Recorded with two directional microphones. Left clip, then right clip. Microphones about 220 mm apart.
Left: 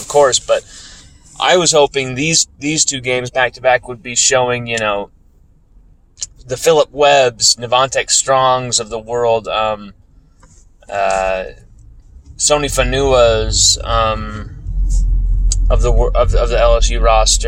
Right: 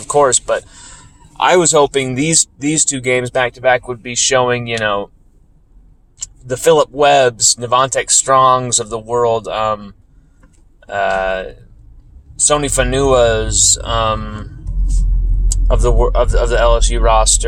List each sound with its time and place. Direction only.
0.1 s speech: 20° right (ahead or behind)
6.5 s speech: 20° right (ahead or behind)
12.5 s speech: 20° right (ahead or behind)
15.4 s speech: 20° right (ahead or behind)